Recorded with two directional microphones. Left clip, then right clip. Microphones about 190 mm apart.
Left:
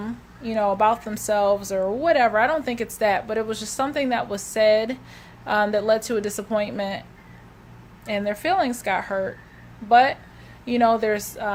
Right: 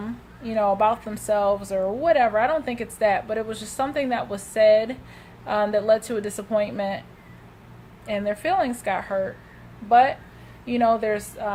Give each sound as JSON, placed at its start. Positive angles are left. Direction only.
{"t": 0.0, "sound": "speech", "side_deg": 20}
{"t": 8.0, "sound": "speech", "side_deg": 25}